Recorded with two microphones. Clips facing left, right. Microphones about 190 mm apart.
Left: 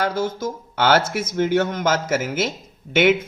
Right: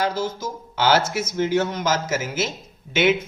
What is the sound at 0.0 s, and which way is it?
A man's voice, 55° left (ahead or behind).